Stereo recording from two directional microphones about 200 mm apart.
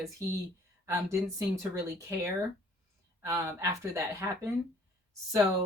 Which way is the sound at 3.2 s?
15° right (ahead or behind).